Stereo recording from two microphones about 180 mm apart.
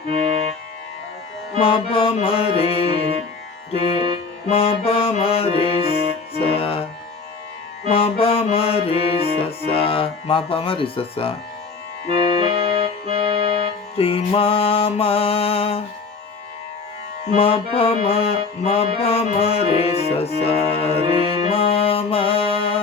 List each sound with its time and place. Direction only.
0.1 s music: 35° right (ahead or behind)
1.5 s music: 30° left (ahead or behind)
2.9 s music: 30° right (ahead or behind)
3.7 s music: 35° left (ahead or behind)
5.9 s music: 35° right (ahead or behind)
6.5 s music: 30° left (ahead or behind)
7.9 s music: 30° left (ahead or behind)
9.6 s speech: 30° left (ahead or behind)
12.0 s music: 30° right (ahead or behind)
13.9 s music: 30° left (ahead or behind)
17.3 s music: 30° left (ahead or behind)